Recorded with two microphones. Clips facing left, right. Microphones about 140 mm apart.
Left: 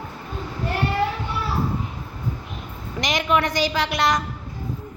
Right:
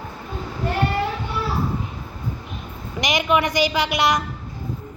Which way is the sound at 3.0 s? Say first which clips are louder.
Right 1 dB; 5° right (ahead or behind).